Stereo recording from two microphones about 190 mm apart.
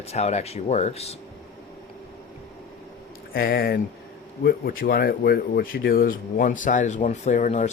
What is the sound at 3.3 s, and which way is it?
Speech, 50° left (ahead or behind).